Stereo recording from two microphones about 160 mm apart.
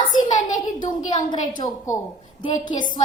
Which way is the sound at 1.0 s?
25° left (ahead or behind).